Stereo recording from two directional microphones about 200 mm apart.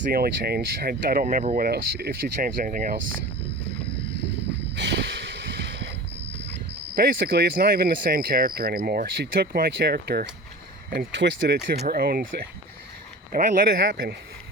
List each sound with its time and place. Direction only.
0.1 s speech: 50° right (ahead or behind)
4.7 s vehicle: 60° right (ahead or behind)
6.9 s speech: 50° right (ahead or behind)
10.9 s speech: 65° right (ahead or behind)
13.3 s speech: 45° right (ahead or behind)
13.7 s speech: 60° right (ahead or behind)